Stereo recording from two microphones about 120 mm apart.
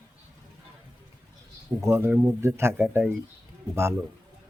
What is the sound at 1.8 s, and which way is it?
Speech, 20° right (ahead or behind).